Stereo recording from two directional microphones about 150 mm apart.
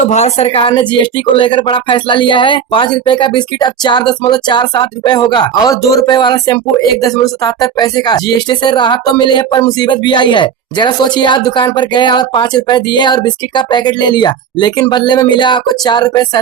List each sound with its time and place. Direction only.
0.1 s a woman's voice: 45° left (ahead or behind)
0.7 s music: 30° left (ahead or behind)